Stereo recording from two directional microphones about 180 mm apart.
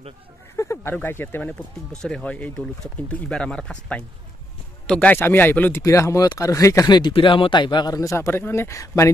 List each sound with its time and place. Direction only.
0.6 s speech: 15° left (ahead or behind)